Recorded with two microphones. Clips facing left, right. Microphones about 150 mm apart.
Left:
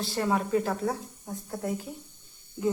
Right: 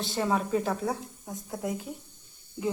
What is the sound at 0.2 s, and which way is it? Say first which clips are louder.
Speech: left 1 dB; centre (ahead or behind).